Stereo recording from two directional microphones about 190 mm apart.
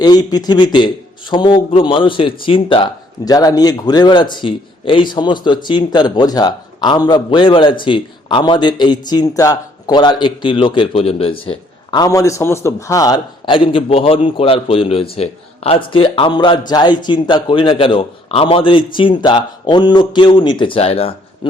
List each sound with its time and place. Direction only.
0.0 s a man's voice: 20° left (ahead or behind)